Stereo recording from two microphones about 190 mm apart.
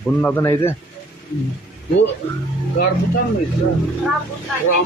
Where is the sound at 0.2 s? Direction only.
10° left (ahead or behind).